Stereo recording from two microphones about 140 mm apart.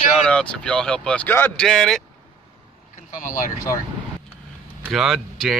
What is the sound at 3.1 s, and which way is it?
Speech, 70° left (ahead or behind).